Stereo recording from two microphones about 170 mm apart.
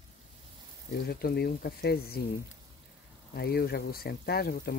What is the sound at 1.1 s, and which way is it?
Speech, 65° left (ahead or behind).